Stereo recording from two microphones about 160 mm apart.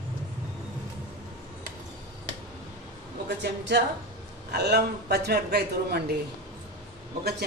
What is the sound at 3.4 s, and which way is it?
A woman's voice, 90° right.